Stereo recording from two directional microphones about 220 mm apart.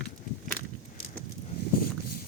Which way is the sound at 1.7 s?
40° left (ahead or behind).